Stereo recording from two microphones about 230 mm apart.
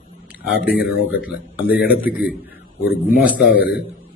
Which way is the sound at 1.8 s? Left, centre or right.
Centre.